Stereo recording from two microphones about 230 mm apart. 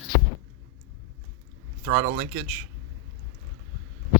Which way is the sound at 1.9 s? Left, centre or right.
Right.